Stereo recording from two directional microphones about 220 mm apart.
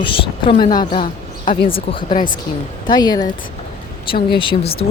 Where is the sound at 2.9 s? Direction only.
20° left (ahead or behind).